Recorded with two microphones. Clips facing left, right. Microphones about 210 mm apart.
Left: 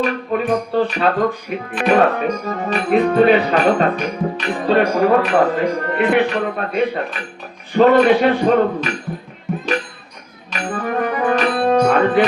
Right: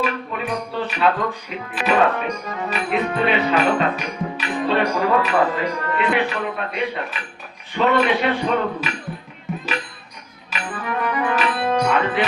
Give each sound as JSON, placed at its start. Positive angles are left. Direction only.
{"t": 0.0, "sound": "music", "side_deg": 45}
{"t": 10.5, "sound": "music", "side_deg": 45}